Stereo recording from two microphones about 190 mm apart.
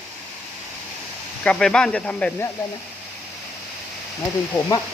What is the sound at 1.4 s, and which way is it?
Speech, 5° left (ahead or behind).